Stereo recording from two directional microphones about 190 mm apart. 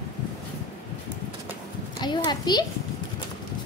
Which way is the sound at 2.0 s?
20° left (ahead or behind).